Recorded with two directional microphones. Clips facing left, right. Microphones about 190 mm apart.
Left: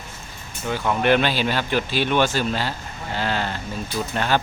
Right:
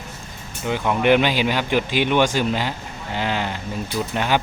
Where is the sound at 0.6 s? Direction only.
15° right (ahead or behind).